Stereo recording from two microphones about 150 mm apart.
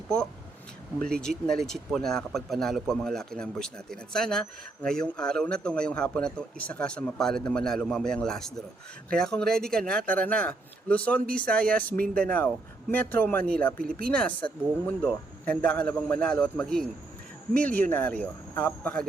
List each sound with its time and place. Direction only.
0.9 s a man's voice: 5° left (ahead or behind)
13.7 s speech: 75° right (ahead or behind)
14.1 s a man's voice: 10° left (ahead or behind)